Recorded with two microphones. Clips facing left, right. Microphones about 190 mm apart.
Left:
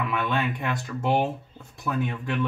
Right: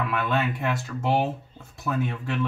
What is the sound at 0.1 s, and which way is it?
Speech, centre (ahead or behind).